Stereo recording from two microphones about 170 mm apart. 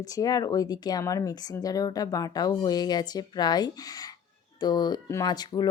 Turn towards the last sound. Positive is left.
turn(degrees=25)  # may be behind; listen again after turning